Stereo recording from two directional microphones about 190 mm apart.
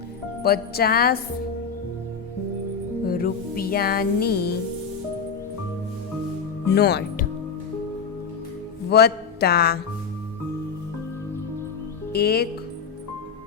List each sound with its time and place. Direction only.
0.4 s music: 55° left (ahead or behind)
3.1 s music: 50° left (ahead or behind)
6.7 s speech: 60° left (ahead or behind)
8.9 s speech: 55° left (ahead or behind)
12.1 s speech: 55° left (ahead or behind)